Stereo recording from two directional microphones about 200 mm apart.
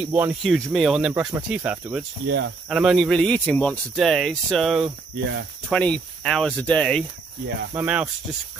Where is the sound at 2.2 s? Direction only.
60° right (ahead or behind).